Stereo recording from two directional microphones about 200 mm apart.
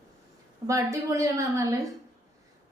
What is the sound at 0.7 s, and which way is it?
Speech, 15° right (ahead or behind).